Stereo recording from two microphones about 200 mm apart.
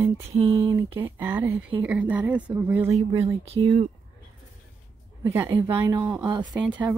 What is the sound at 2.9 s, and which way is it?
Speech, 30° right (ahead or behind).